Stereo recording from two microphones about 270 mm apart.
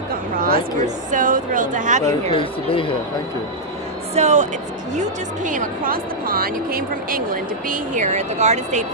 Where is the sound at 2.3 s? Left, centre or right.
Centre.